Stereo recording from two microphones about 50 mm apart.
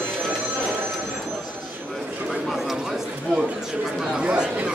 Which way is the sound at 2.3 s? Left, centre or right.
Centre.